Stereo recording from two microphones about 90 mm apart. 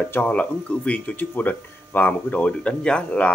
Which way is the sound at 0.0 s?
15° left (ahead or behind).